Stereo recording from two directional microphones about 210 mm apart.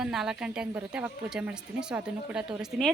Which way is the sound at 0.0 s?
Centre (ahead or behind).